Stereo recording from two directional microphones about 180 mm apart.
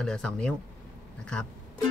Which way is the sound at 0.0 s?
5° left (ahead or behind).